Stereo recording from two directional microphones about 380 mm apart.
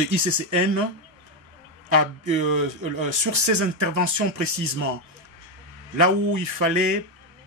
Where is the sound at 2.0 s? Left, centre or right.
Right.